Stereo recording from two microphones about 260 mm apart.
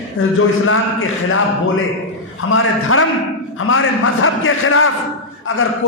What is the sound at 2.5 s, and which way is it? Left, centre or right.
A man's voice, left.